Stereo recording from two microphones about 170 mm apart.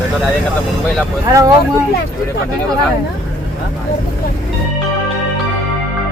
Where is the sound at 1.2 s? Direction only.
20° right (ahead or behind).